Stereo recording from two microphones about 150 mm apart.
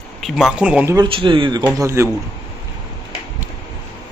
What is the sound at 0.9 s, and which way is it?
Speech, 30° right (ahead or behind).